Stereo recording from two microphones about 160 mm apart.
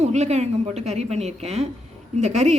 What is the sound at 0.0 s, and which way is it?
Speech, 45° right (ahead or behind).